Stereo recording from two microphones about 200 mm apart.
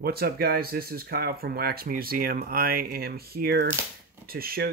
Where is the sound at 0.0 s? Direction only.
50° right (ahead or behind).